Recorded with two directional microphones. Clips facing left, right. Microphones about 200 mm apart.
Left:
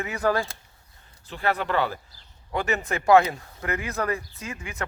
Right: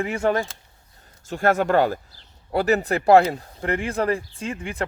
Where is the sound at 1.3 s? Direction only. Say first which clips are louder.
Right 7 dB; 45° right (ahead or behind).